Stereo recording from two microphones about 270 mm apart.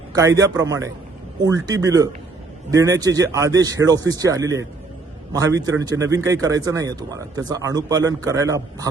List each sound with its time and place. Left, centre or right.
0.1 s speech: centre